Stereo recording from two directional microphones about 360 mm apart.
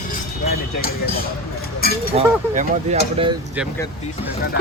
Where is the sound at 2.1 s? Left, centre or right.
Centre.